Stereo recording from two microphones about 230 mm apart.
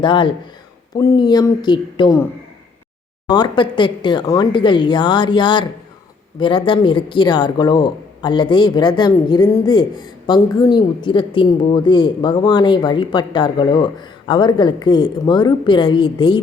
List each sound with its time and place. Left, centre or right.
0.0 s speech: left
3.2 s speech: centre